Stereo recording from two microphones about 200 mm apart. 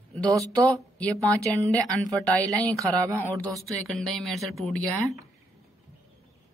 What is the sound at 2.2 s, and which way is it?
Speech, 5° left (ahead or behind).